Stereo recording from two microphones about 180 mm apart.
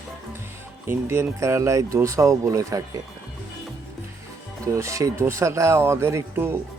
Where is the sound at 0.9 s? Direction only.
15° right (ahead or behind).